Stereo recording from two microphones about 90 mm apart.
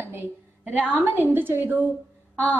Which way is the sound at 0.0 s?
25° right (ahead or behind).